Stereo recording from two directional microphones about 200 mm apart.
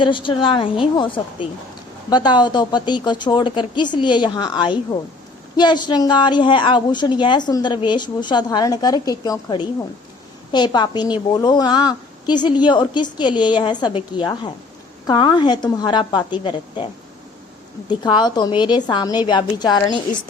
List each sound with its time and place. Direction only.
0.0 s a woman's voice: 25° left (ahead or behind)